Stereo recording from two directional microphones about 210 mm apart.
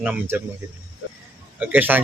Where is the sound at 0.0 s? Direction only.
10° right (ahead or behind).